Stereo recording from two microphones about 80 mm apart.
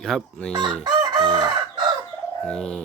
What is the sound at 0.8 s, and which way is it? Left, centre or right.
Chicken, right.